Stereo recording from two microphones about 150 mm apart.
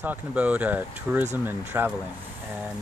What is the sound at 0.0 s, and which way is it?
Speech, 10° right (ahead or behind).